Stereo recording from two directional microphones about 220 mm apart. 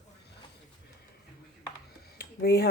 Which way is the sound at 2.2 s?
45° left (ahead or behind).